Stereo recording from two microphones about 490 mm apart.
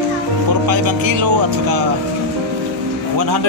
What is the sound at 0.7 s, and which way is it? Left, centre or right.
A man's voice, right.